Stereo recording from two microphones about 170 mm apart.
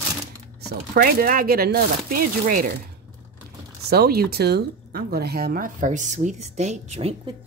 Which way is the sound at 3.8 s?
65° right (ahead or behind).